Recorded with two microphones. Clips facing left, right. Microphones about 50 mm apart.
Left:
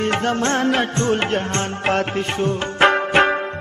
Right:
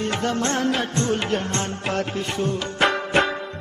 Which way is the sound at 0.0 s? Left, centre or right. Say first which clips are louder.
Left 4 dB; left.